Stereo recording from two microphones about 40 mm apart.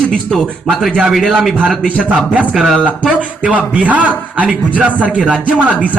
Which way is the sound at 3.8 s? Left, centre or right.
Right.